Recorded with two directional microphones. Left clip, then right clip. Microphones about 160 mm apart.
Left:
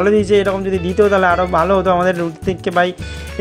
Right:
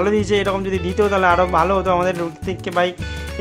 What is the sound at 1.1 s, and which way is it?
Speech, 20° left (ahead or behind).